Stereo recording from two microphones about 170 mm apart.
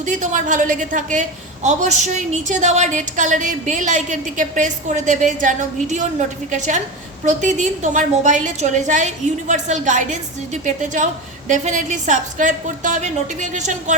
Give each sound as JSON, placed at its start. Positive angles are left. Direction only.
{"t": 0.0, "sound": "a woman's voice", "side_deg": -45}